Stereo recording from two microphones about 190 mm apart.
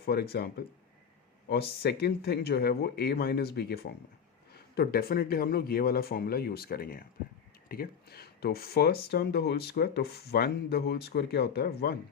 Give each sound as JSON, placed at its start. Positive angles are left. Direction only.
{"t": 0.0, "sound": "speech", "side_deg": 55}
{"t": 1.8, "sound": "speech", "side_deg": 55}